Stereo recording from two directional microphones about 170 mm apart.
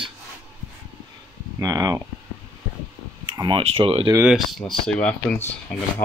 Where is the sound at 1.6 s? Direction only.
20° right (ahead or behind).